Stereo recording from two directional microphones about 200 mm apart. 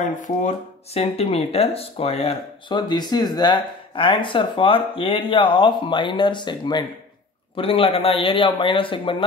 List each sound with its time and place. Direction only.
0.0 s speech: 40° left (ahead or behind)